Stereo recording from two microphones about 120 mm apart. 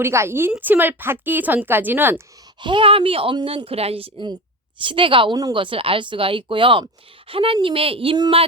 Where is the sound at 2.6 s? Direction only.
45° right (ahead or behind).